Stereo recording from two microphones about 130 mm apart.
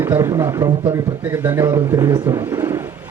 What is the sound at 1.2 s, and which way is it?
Speech, 20° right (ahead or behind).